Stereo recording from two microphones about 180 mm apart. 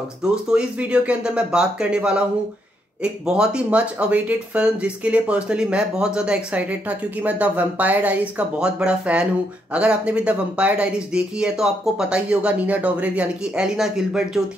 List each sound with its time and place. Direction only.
0.5 s speech: 5° right (ahead or behind)